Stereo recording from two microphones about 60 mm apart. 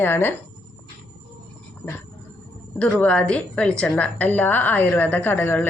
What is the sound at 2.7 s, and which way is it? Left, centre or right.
A woman's voice, left.